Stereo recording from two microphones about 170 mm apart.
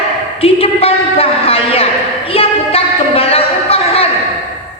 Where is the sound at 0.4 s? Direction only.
35° left (ahead or behind).